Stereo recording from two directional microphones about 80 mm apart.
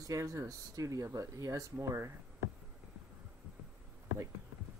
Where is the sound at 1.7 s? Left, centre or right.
Right.